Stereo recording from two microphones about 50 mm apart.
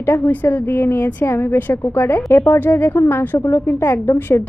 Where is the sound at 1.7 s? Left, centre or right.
Left.